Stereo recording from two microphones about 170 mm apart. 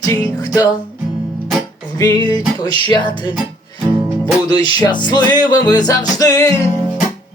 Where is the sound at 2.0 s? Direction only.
25° left (ahead or behind).